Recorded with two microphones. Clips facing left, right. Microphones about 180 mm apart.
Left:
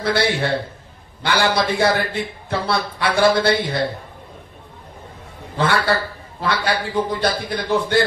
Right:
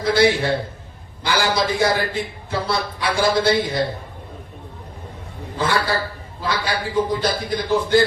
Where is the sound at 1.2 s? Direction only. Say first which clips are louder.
Left 1 dB; 65° left (ahead or behind).